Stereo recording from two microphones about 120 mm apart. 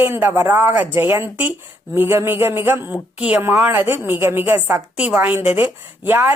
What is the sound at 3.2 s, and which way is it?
A woman's voice, 10° right (ahead or behind).